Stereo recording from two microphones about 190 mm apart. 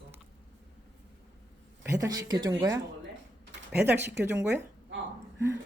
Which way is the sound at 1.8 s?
15° right (ahead or behind).